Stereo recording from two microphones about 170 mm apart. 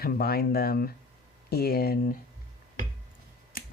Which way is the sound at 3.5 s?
55° left (ahead or behind).